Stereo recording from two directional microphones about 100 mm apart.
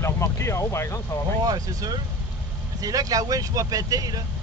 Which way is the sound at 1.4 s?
40° right (ahead or behind).